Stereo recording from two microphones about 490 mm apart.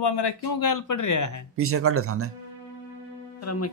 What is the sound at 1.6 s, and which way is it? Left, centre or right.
Speech, right.